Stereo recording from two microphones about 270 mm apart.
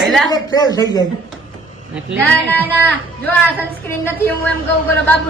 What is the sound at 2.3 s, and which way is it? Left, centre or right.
A woman's voice, centre.